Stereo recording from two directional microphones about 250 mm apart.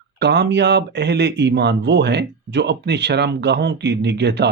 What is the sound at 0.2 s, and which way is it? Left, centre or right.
Speech, right.